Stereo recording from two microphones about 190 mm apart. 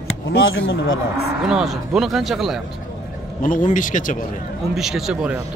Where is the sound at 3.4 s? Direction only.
45° left (ahead or behind).